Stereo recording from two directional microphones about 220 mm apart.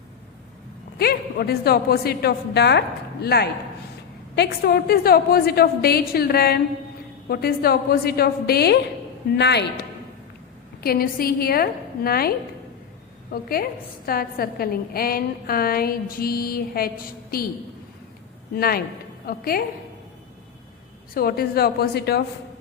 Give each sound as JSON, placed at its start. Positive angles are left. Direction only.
{"t": 0.9, "sound": "a woman's voice", "side_deg": 45}
{"t": 10.8, "sound": "a woman's voice", "side_deg": 45}
{"t": 13.3, "sound": "a woman's voice", "side_deg": 45}
{"t": 18.5, "sound": "a woman's voice", "side_deg": 45}
{"t": 21.1, "sound": "a woman's voice", "side_deg": 40}